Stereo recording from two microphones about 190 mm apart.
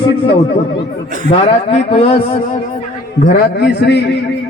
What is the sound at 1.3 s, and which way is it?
A man's voice, 30° left (ahead or behind).